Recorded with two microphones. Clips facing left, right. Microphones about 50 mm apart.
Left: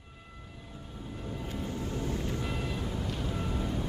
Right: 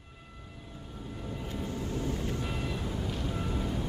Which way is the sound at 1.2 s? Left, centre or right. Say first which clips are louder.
Even; centre.